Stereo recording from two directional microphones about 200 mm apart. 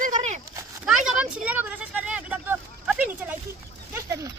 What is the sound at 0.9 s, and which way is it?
Speech, 5° right (ahead or behind).